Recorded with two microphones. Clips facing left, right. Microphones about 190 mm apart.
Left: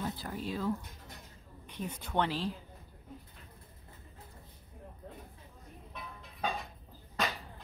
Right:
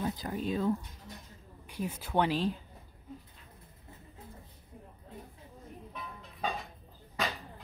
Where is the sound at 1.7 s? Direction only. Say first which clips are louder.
Right 3 dB; 5° right (ahead or behind).